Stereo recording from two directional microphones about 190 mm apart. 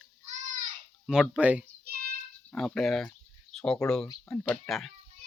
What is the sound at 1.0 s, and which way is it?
Speech, centre (ahead or behind).